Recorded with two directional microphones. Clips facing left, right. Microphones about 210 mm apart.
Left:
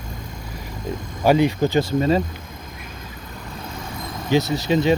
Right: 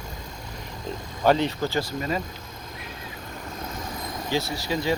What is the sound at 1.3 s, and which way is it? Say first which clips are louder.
Speech: left 5 dB; 10° left (ahead or behind).